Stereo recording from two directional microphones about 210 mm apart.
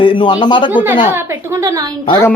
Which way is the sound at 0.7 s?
10° right (ahead or behind).